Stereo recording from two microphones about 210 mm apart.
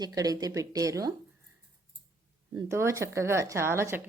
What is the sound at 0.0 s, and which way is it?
A woman's voice, 15° right (ahead or behind).